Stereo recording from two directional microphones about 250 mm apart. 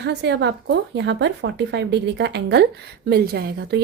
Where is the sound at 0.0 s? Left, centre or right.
Right.